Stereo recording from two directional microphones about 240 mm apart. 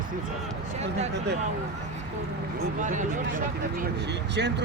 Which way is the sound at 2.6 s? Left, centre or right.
Right.